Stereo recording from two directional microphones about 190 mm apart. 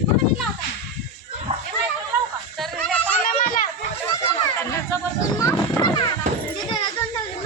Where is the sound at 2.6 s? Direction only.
5° left (ahead or behind).